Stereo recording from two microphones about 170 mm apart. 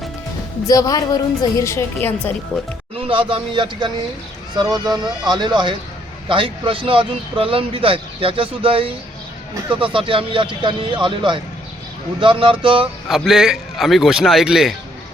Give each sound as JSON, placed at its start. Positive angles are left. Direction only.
{"t": 0.7, "sound": "a woman's voice", "side_deg": 20}
{"t": 3.1, "sound": "speech", "side_deg": -30}
{"t": 13.1, "sound": "a man's voice", "side_deg": 0}